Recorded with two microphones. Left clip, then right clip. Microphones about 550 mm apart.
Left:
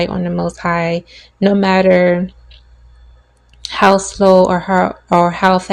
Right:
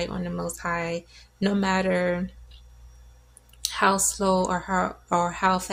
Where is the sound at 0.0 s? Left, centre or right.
Right.